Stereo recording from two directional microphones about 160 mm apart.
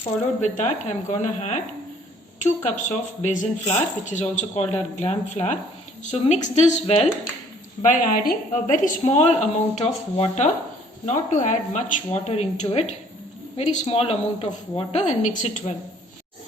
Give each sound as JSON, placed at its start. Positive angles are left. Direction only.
{"t": 0.0, "sound": "a woman's voice", "side_deg": 50}
{"t": 7.9, "sound": "a woman's voice", "side_deg": 55}